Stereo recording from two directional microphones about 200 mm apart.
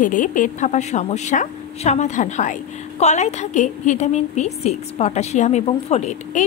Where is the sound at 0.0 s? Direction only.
40° left (ahead or behind).